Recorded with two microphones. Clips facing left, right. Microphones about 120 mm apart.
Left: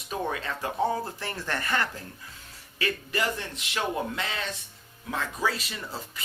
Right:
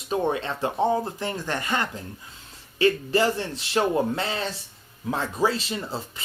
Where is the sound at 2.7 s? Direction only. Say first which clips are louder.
Right 9 dB; 30° right (ahead or behind).